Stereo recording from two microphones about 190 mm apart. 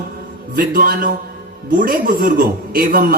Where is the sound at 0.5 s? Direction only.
50° right (ahead or behind).